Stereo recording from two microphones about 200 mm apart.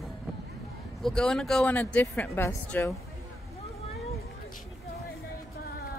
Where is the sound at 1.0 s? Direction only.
5° left (ahead or behind).